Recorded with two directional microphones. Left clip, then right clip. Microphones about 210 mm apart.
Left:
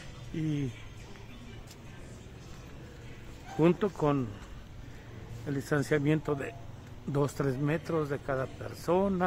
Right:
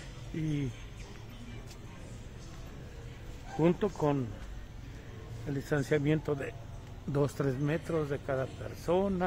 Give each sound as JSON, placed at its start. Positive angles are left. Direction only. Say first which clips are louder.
{"t": 0.4, "sound": "speech", "louder": "left 2 dB", "side_deg": 15}
{"t": 3.6, "sound": "a man's voice", "louder": "left 2 dB", "side_deg": 25}
{"t": 5.5, "sound": "a man's voice", "louder": "left 1 dB", "side_deg": 20}